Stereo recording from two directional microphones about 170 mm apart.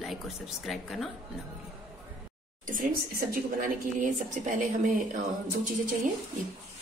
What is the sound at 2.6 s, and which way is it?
A woman's voice, 55° right (ahead or behind).